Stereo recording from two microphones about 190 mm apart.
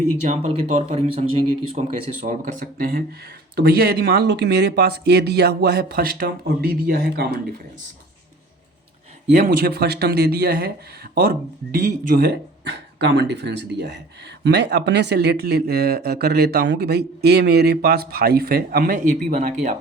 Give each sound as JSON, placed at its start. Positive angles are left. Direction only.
{"t": 0.3, "sound": "speech", "side_deg": -35}
{"t": 9.3, "sound": "speech", "side_deg": -45}